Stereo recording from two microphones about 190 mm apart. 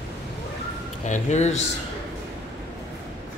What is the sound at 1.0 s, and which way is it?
Speech, 40° left (ahead or behind).